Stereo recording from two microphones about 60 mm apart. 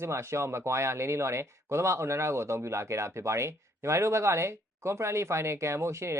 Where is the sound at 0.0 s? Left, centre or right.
Right.